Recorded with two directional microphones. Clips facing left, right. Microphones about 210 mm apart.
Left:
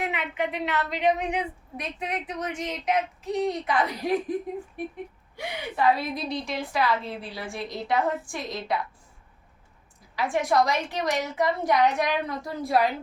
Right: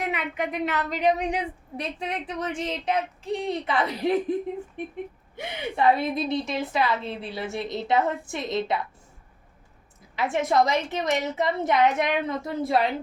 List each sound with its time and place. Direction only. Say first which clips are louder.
0.0 s a woman's voice: even; 40° right (ahead or behind); by 4.1 s 25° right (ahead or behind)
5.4 s a woman's voice: right 2 dB; 25° right (ahead or behind)
10.2 s a woman's voice: right 1 dB; 20° right (ahead or behind)